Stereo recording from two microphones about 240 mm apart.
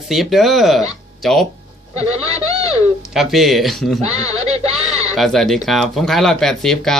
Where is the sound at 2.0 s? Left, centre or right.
Right.